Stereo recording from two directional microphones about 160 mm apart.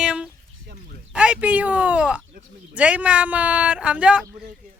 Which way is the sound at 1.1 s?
5° right (ahead or behind).